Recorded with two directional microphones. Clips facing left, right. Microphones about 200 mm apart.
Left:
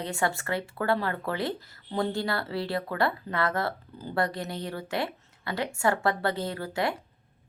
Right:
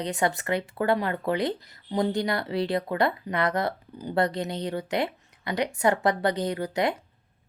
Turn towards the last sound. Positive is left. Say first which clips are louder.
# right 4 dB
turn(degrees=-20)  # may be behind; listen again after turning